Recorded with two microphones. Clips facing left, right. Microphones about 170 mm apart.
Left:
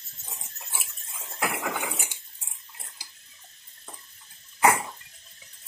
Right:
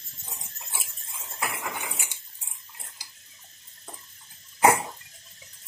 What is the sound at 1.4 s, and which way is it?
Cutlery, 80° left.